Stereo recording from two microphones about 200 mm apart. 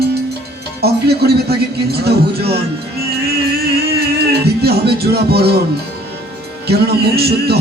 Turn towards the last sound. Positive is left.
turn(degrees=-55)  # may be behind; listen again after turning